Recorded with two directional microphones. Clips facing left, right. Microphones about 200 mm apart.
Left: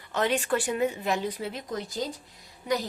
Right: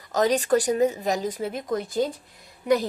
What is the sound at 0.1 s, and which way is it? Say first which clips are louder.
Speech: right 6 dB; 40° right (ahead or behind).